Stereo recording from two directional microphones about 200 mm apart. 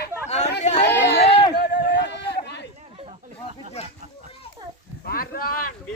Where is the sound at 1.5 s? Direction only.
55° left (ahead or behind).